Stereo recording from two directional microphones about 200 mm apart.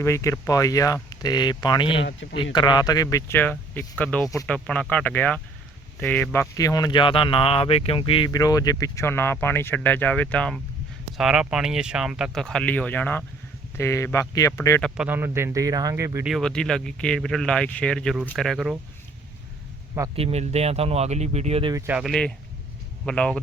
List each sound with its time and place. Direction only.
0.0 s speech: 15° left (ahead or behind)
2.0 s speech: 65° left (ahead or behind)
2.3 s speech: 25° left (ahead or behind)
14.8 s speech: 5° left (ahead or behind)
15.0 s speech: 10° right (ahead or behind)
16.2 s speech: centre (ahead or behind)
20.1 s speech: 30° right (ahead or behind)
21.8 s speech: 5° right (ahead or behind)